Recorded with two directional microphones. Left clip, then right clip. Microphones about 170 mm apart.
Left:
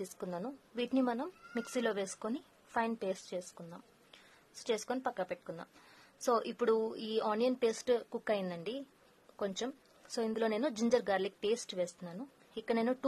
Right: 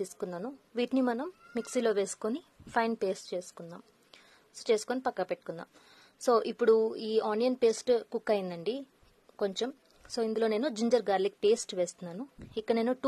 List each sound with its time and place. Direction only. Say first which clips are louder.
0.0 s a woman's voice: right 4 dB; 15° right (ahead or behind)
0.7 s a woman's voice: right 4 dB; 25° right (ahead or behind)